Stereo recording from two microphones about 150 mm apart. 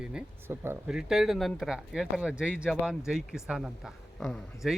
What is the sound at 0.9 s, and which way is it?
Speech, 5° right (ahead or behind).